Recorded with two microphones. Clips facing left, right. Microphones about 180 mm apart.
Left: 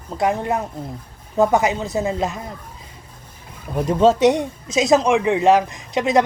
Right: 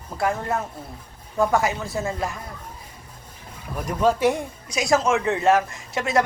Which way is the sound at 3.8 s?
25° left (ahead or behind).